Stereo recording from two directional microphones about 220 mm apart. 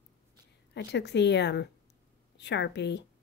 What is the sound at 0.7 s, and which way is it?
A woman's voice, 50° left (ahead or behind).